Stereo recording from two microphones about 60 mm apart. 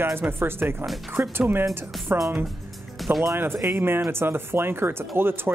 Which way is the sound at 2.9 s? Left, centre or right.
Centre.